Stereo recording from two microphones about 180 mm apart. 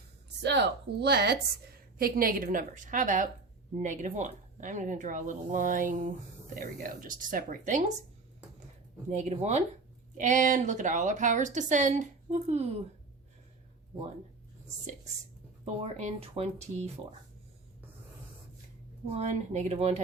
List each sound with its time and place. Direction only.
0.4 s a woman's voice: 70° right (ahead or behind); by 7.9 s 45° right (ahead or behind)
9.0 s a woman's voice: 40° right (ahead or behind)
15.6 s speech: 40° right (ahead or behind)
19.1 s speech: 40° right (ahead or behind)